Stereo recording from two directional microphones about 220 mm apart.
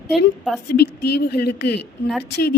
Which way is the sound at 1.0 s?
50° left (ahead or behind).